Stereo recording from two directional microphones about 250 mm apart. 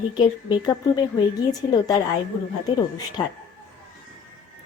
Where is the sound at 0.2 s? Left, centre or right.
Centre.